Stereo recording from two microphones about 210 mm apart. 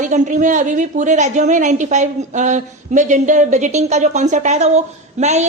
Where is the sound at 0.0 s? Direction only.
35° right (ahead or behind).